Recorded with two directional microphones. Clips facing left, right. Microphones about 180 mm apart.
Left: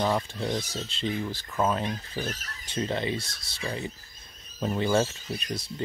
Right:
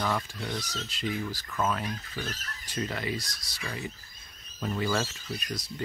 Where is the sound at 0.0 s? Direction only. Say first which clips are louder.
Left 4 dB; 25° left (ahead or behind).